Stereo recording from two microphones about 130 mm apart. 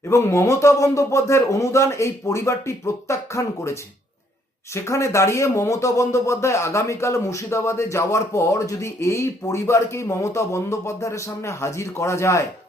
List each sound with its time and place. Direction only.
0.1 s speech: 20° left (ahead or behind)